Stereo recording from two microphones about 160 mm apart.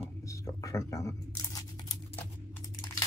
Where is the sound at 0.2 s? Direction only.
20° left (ahead or behind).